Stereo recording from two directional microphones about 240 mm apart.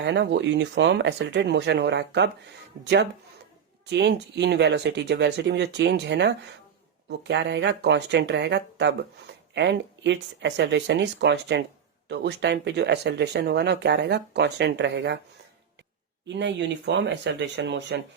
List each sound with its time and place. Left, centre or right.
0.0 s speech: right
16.2 s speech: right